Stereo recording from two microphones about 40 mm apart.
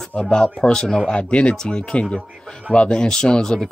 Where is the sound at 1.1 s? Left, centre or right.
Left.